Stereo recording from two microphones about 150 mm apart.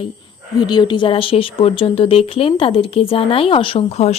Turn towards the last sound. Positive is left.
turn(degrees=45)  # may be behind; listen again after turning